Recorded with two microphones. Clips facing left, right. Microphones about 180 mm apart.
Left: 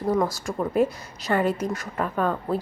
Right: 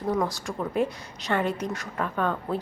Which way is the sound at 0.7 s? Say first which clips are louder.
Left 4 dB; centre (ahead or behind).